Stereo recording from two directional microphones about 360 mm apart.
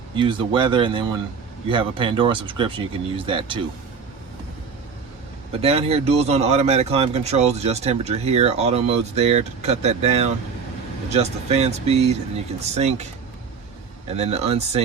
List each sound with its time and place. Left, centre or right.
0.2 s a man's voice: centre
5.6 s a man's voice: centre
14.1 s a man's voice: centre